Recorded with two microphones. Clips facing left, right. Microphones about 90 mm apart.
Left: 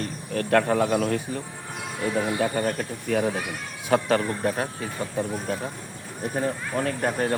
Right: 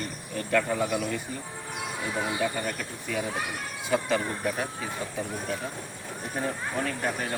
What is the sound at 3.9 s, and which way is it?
Speech, 55° left (ahead or behind).